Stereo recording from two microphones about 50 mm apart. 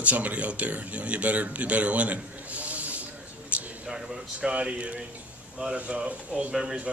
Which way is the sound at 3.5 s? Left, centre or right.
Right.